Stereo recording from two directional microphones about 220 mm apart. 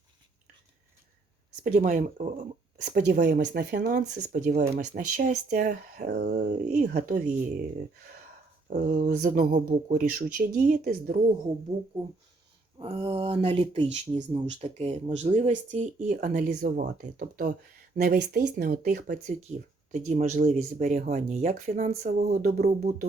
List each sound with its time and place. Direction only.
1.6 s speech: 35° right (ahead or behind)
8.7 s speech: 35° right (ahead or behind)
12.8 s speech: 25° right (ahead or behind)